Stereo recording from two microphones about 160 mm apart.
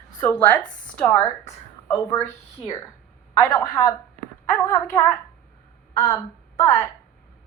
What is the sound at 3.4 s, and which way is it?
A woman's voice, 20° left (ahead or behind).